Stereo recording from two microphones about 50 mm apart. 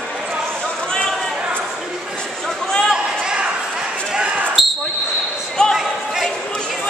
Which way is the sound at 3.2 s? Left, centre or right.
Centre.